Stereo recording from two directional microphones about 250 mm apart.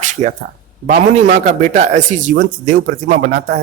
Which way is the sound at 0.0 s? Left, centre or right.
Right.